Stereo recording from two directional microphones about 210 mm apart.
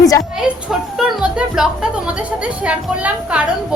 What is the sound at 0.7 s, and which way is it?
Speech, centre (ahead or behind).